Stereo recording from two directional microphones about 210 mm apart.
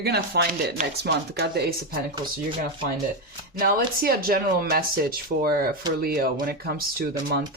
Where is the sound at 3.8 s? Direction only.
45° right (ahead or behind).